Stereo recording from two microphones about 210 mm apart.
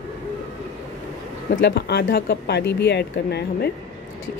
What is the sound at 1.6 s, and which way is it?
A woman's voice, 50° left (ahead or behind).